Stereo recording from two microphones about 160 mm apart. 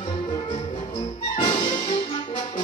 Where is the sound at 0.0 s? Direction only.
35° left (ahead or behind).